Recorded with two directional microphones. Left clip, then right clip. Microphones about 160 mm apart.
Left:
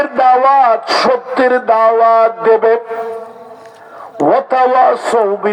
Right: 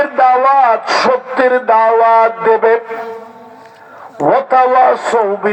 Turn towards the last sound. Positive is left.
turn(degrees=45)  # may be behind; listen again after turning